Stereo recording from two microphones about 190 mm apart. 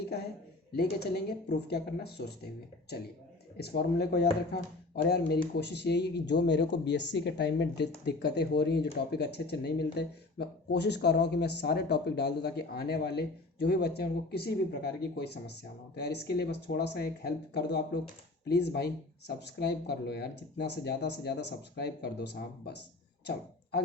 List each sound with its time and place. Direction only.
0.8 s speech: 60° left (ahead or behind)
3.6 s speech: 60° left (ahead or behind)